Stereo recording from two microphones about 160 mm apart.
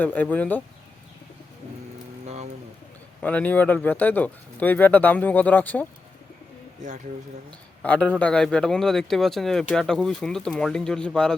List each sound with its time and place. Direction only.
0.0 s speech: 10° left (ahead or behind)
2.2 s a sound: 45° right (ahead or behind)
3.2 s speech: 10° left (ahead or behind)
7.8 s a man's voice: 5° left (ahead or behind)